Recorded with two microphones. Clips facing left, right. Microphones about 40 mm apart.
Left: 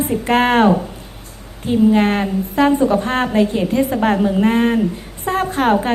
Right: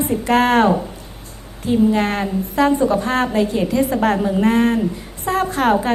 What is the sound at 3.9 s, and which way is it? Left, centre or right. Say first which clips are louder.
A woman's voice: left 1 dB; centre.